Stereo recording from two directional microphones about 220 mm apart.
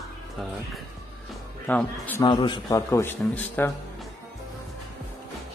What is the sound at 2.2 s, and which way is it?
Speech, 20° left (ahead or behind).